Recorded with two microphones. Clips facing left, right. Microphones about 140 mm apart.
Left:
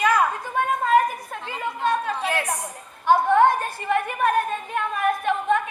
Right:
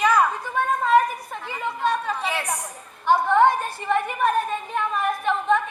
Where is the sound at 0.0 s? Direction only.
50° left (ahead or behind).